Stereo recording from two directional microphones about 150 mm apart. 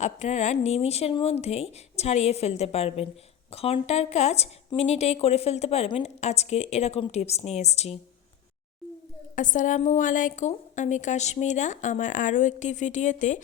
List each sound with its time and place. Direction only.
0.0 s a woman's voice: 50° left (ahead or behind)
9.3 s a woman's voice: 60° left (ahead or behind)